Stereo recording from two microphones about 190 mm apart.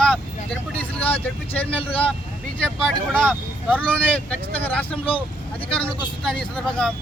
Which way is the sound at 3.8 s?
10° left (ahead or behind).